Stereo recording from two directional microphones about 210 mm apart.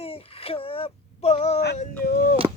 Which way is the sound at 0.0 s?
25° left (ahead or behind).